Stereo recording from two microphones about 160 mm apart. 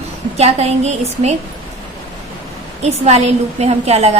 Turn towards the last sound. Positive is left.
turn(degrees=-40)  # may be behind; listen again after turning